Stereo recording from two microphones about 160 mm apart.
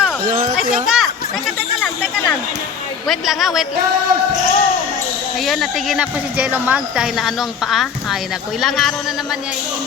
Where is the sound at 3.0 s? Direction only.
Centre (ahead or behind).